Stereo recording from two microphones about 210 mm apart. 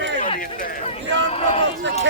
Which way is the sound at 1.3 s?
30° left (ahead or behind).